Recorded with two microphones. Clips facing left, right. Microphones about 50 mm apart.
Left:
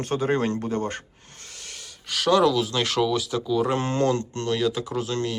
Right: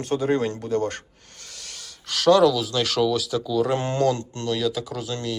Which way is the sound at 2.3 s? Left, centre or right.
Left.